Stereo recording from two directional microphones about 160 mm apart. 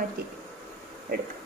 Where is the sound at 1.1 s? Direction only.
70° right (ahead or behind).